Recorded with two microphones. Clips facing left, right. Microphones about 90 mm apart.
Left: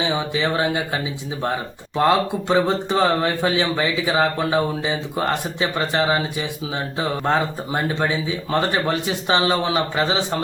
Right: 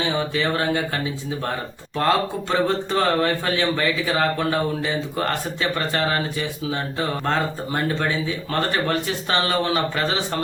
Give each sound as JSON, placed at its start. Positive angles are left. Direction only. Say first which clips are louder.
{"t": 0.0, "sound": "speech", "louder": "left 1 dB", "side_deg": 15}